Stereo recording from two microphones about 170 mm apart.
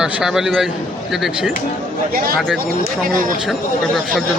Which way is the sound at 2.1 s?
60° right (ahead or behind).